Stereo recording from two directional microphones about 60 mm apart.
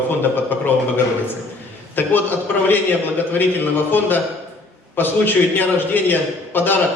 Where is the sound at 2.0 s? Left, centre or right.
Left.